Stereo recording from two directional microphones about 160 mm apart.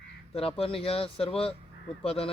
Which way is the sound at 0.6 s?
35° left (ahead or behind).